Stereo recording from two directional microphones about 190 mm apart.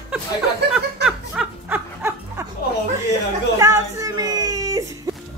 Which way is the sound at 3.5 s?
15° right (ahead or behind).